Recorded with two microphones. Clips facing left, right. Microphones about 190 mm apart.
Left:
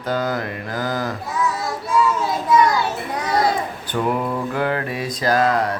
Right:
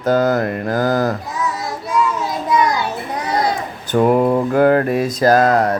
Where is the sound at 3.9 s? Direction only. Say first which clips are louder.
Right 9 dB; 45° right (ahead or behind).